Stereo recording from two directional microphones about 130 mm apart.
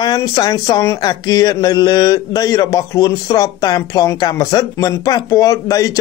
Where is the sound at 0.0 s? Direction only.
30° left (ahead or behind).